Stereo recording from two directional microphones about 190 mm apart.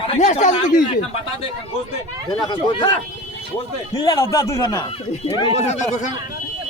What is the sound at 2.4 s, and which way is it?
Speech, 25° left (ahead or behind).